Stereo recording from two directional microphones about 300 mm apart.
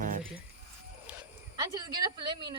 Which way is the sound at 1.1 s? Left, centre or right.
Centre.